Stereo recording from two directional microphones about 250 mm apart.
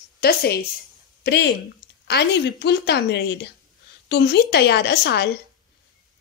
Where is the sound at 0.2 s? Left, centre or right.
Left.